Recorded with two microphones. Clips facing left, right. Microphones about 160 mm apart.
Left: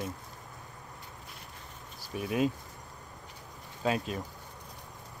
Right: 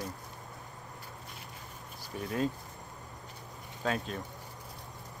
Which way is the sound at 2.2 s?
15° left (ahead or behind).